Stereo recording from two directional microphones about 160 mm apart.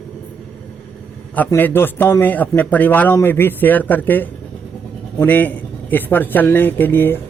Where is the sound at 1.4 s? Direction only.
15° left (ahead or behind).